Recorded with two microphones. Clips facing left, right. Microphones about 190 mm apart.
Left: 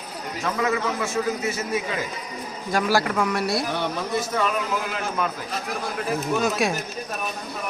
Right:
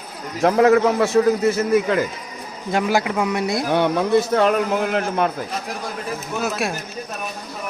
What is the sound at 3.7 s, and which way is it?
A man's voice, 60° right (ahead or behind).